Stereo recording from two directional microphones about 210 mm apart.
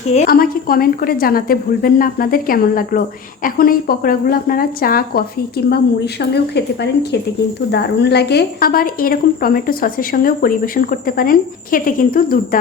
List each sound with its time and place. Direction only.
0.1 s a woman's voice: 40° left (ahead or behind)